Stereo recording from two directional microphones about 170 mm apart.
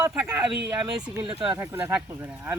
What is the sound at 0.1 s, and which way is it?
Speech, 10° right (ahead or behind).